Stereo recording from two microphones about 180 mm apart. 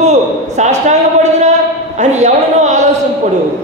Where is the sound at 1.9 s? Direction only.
40° right (ahead or behind).